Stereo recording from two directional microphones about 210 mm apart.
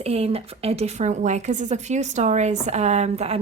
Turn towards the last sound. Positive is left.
turn(degrees=-30)  # may be behind; listen again after turning